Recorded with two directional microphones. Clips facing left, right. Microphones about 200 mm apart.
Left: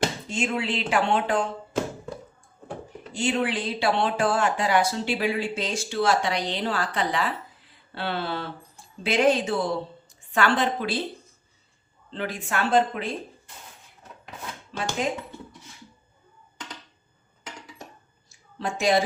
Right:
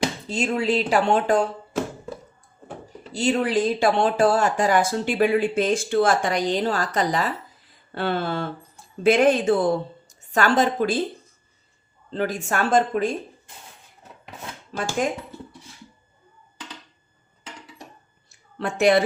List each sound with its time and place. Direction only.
0.3 s speech: 40° right (ahead or behind)
3.1 s speech: 40° right (ahead or behind)
12.1 s speech: 40° right (ahead or behind)
14.7 s speech: 45° right (ahead or behind)
18.3 s a sound: 60° right (ahead or behind)